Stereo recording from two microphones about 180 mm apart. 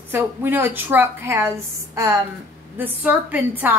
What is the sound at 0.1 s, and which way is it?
A woman's voice, 10° right (ahead or behind).